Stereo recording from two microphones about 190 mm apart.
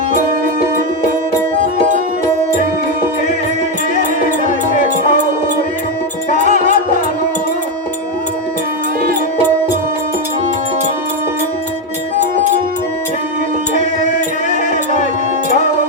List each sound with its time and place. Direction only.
6.4 s music: 40° right (ahead or behind)